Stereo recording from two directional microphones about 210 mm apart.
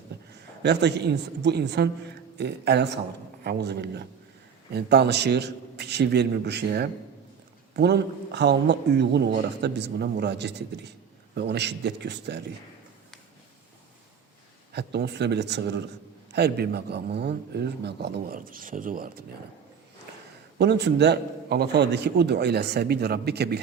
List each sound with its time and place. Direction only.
0.6 s a man's voice: 55° right (ahead or behind)
14.7 s a man's voice: 55° right (ahead or behind)
20.6 s a man's voice: 55° right (ahead or behind)